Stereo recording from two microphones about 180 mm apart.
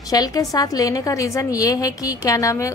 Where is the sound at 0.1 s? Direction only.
20° left (ahead or behind).